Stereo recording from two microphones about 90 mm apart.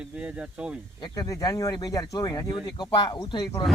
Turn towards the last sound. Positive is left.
turn(degrees=50)  # may be behind; listen again after turning